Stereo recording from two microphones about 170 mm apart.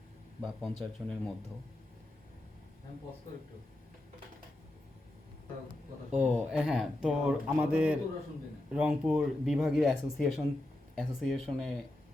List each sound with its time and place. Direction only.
0.4 s speech: centre (ahead or behind)
6.1 s speech: 45° right (ahead or behind)
6.5 s speech: 5° right (ahead or behind)